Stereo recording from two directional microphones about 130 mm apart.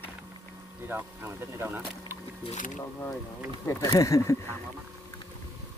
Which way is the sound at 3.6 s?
20° left (ahead or behind).